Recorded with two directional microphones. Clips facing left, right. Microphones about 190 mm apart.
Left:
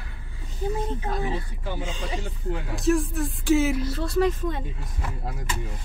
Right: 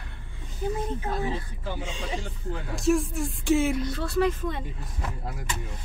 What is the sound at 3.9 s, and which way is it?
Speech, 40° left (ahead or behind).